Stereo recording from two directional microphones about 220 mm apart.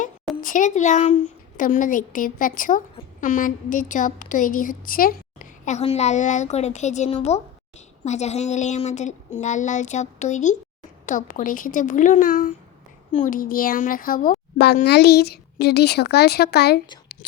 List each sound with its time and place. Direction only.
0.0 s a woman's voice: 35° left (ahead or behind)